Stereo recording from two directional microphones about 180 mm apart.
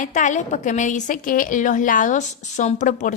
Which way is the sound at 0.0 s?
45° left (ahead or behind).